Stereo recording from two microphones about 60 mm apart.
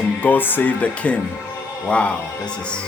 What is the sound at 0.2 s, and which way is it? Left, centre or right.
Speech, left.